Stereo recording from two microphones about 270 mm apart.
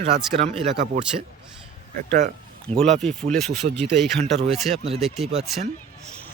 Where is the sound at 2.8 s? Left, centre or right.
Centre.